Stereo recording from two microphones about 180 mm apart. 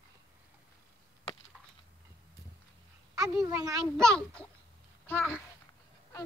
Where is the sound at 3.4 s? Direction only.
20° right (ahead or behind).